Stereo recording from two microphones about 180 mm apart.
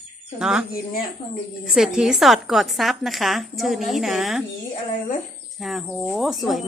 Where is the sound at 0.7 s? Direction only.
55° left (ahead or behind).